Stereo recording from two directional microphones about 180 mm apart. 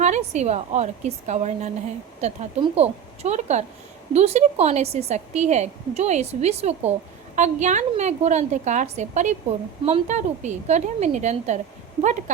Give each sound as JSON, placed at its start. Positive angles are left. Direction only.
{"t": 0.0, "sound": "a woman's voice", "side_deg": -40}